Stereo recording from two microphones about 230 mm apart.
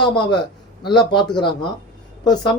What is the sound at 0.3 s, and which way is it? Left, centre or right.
Speech, centre.